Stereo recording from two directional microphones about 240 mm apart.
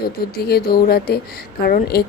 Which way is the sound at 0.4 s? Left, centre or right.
Left.